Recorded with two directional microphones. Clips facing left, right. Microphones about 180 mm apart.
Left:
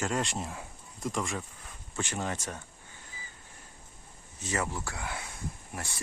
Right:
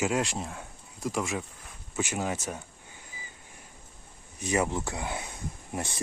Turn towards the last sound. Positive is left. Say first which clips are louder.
# right 6 dB
turn(degrees=-20)  # may be behind; listen again after turning